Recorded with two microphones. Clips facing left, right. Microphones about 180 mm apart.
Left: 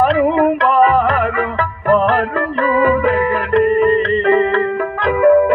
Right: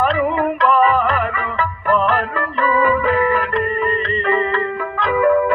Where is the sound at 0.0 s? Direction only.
55° left (ahead or behind).